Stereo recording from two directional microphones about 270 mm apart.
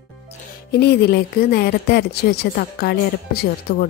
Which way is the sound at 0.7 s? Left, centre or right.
Left.